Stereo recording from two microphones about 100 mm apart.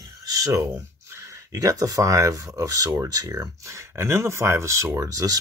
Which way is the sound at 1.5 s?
35° right (ahead or behind).